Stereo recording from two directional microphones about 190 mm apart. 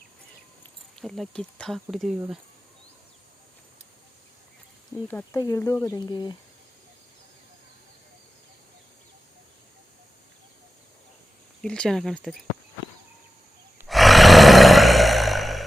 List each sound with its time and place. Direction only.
0.9 s speech: centre (ahead or behind)
5.1 s speech: 15° left (ahead or behind)
11.6 s speech: 5° left (ahead or behind)
13.7 s roar: centre (ahead or behind)